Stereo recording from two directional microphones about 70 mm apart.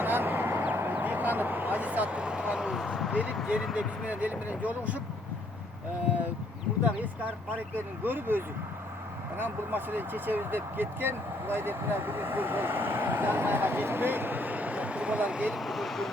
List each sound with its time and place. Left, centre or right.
0.0 s a sound: right; by 3.2 s centre
3.4 s speech: centre
3.8 s speech: centre
8.0 s speech: right
15.4 s speech: centre